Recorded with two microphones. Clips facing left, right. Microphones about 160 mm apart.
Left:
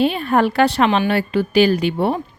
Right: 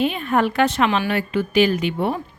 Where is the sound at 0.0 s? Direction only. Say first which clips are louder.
Left 3 dB; 35° left (ahead or behind).